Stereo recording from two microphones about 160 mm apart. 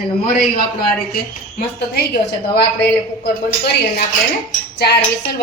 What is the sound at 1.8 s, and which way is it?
A woman's voice, 90° left.